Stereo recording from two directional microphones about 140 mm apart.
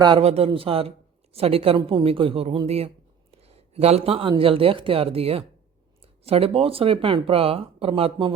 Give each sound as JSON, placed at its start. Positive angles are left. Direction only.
{"t": 0.2, "sound": "speech", "side_deg": -45}